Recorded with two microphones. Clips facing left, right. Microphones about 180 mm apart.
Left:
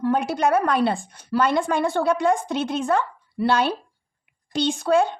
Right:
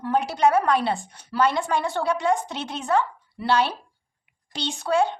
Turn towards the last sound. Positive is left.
turn(degrees=50)  # may be behind; listen again after turning